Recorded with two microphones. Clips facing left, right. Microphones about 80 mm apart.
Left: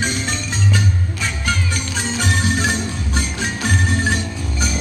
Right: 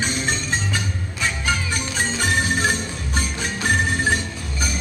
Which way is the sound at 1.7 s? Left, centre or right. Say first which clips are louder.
Left 1 dB; right.